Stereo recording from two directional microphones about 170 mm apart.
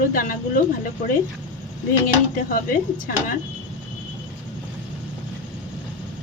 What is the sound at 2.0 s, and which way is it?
Speech, 55° left (ahead or behind).